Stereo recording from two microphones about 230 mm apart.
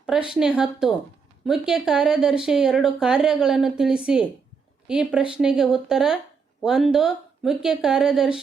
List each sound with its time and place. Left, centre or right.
0.0 s speech: centre